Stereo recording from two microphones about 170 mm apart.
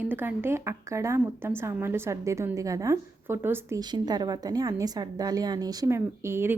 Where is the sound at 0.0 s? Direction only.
10° right (ahead or behind).